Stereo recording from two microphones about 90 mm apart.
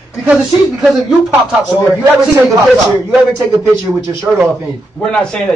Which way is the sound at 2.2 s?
Centre (ahead or behind).